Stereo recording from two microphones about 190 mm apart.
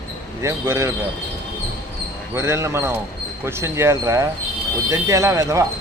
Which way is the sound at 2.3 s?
15° right (ahead or behind).